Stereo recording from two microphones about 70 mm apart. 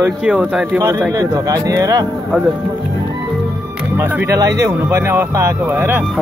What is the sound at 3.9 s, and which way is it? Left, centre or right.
Speech, right.